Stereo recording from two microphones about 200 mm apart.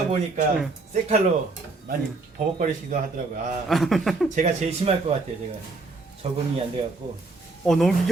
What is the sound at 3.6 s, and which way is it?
Speech, centre (ahead or behind).